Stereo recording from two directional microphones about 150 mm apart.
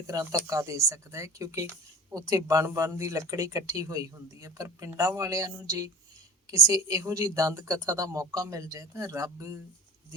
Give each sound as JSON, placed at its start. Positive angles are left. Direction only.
{"t": 0.1, "sound": "speech", "side_deg": -20}